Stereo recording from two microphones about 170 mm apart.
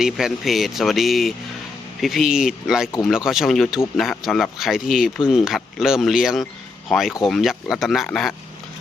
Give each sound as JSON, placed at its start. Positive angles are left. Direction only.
{"t": 0.0, "sound": "a man's voice", "side_deg": 0}